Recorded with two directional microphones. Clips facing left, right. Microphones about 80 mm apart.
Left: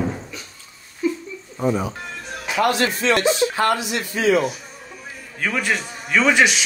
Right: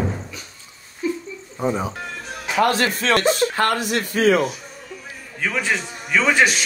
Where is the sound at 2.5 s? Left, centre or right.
Right.